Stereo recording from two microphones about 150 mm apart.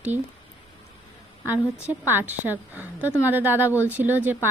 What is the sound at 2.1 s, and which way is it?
Speech, 15° right (ahead or behind).